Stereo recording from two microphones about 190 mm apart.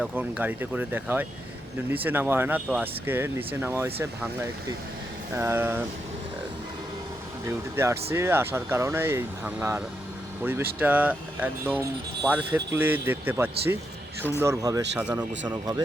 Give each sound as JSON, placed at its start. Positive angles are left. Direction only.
{"t": 0.0, "sound": "speech", "side_deg": -5}
{"t": 5.3, "sound": "speech", "side_deg": -15}
{"t": 7.4, "sound": "speech", "side_deg": -15}
{"t": 14.9, "sound": "speech", "side_deg": -5}